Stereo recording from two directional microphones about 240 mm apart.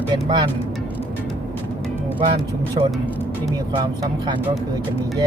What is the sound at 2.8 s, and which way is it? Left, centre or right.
Speech, right.